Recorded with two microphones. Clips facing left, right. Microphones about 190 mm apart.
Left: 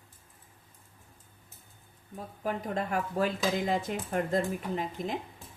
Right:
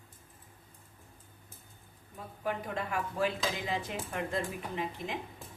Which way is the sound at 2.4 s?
40° left (ahead or behind).